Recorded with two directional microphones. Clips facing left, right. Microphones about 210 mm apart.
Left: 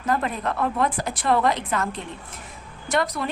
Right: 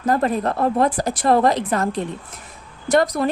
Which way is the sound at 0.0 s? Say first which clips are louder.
Right 6 dB; 35° right (ahead or behind).